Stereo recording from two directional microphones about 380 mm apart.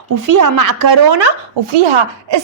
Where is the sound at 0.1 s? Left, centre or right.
Right.